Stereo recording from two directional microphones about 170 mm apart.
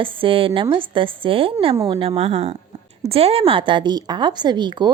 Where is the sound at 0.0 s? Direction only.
30° right (ahead or behind).